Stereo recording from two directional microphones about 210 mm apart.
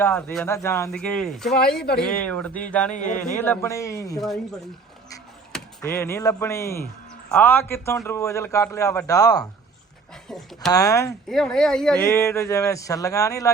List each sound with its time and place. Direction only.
0.0 s speech: 10° left (ahead or behind)
2.9 s speech: 35° left (ahead or behind)
3.4 s speech: 10° left (ahead or behind)
5.5 s speech: 5° left (ahead or behind)
10.2 s speech: centre (ahead or behind)
10.7 s speech: 15° left (ahead or behind)
11.3 s speech: centre (ahead or behind)